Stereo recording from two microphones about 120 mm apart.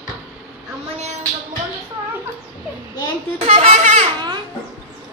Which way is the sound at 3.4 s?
65° right (ahead or behind).